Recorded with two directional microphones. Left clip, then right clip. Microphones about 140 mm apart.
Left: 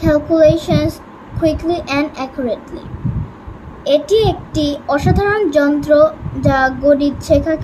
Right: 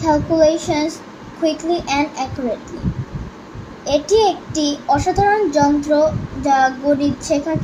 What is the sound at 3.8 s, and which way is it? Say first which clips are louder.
A child's voice: left 2 dB; 50° left (ahead or behind).